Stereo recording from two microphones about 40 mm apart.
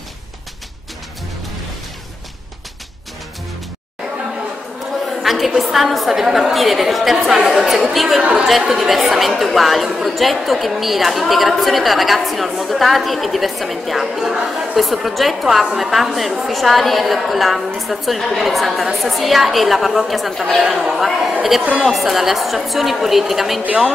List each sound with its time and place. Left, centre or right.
5.0 s a sound: centre
5.6 s a woman's voice: centre
8.2 s a woman's voice: right
8.5 s a woman's voice: centre